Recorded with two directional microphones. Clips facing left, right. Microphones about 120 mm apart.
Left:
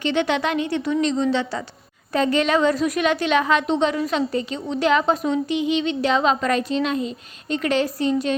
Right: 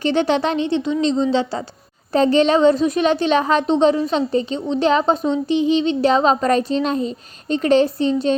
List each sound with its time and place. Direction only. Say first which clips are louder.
0.0 s a woman's voice: right 4 dB; 35° right (ahead or behind)